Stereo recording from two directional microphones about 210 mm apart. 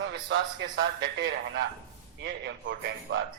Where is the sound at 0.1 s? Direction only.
55° right (ahead or behind).